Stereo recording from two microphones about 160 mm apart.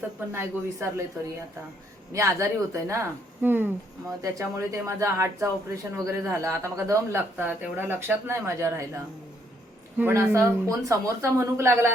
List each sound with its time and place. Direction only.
0.3 s speech: 15° right (ahead or behind)
2.1 s speech: 15° right (ahead or behind)
10.0 s speech: 15° right (ahead or behind)